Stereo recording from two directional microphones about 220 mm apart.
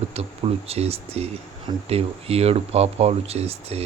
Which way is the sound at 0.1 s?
25° right (ahead or behind).